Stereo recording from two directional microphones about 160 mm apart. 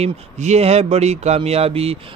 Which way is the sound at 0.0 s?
45° right (ahead or behind).